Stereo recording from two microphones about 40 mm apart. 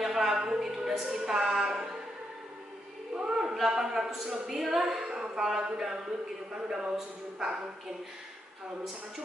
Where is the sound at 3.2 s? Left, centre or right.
Centre.